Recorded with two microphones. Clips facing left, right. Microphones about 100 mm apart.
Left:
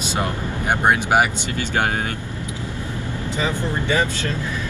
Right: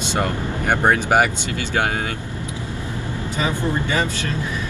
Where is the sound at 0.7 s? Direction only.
15° left (ahead or behind).